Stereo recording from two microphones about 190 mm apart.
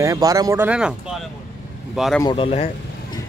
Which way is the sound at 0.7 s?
5° right (ahead or behind).